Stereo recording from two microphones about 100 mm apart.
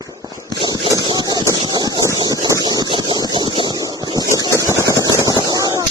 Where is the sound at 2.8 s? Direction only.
50° right (ahead or behind).